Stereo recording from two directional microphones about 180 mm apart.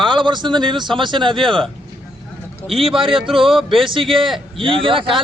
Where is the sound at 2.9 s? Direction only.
30° right (ahead or behind).